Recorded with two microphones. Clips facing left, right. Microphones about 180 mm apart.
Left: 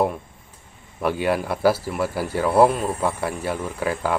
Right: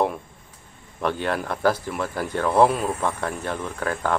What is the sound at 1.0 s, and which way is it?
Speech, 10° left (ahead or behind).